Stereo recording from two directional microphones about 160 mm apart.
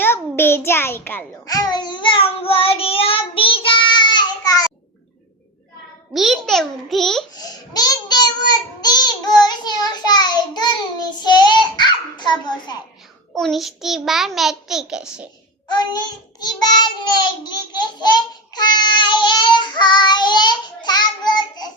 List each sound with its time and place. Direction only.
0.0 s child singing: 15° left (ahead or behind)
6.1 s a child's voice: centre (ahead or behind)
7.3 s a child's voice: 25° left (ahead or behind)
13.3 s a child's voice: centre (ahead or behind)
15.7 s child singing: 25° left (ahead or behind)